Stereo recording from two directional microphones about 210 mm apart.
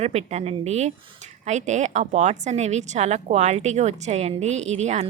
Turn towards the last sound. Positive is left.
turn(degrees=-30)  # may be behind; listen again after turning